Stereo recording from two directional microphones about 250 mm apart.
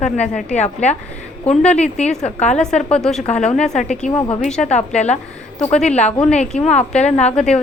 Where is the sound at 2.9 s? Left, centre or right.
Centre.